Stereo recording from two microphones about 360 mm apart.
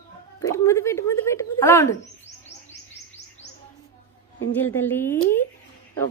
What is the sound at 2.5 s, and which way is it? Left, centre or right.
Chirp, left.